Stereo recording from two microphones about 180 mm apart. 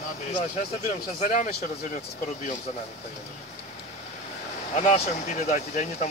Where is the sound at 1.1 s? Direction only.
40° left (ahead or behind).